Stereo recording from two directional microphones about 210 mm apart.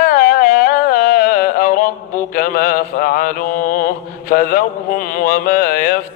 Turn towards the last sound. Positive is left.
turn(degrees=45)  # may be behind; listen again after turning